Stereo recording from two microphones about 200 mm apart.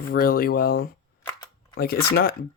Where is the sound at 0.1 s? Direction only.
45° left (ahead or behind).